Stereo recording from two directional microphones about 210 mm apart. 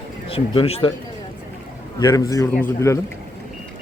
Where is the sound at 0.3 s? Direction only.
25° left (ahead or behind).